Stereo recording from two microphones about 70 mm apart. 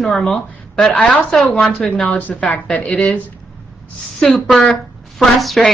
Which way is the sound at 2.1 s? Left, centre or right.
Left.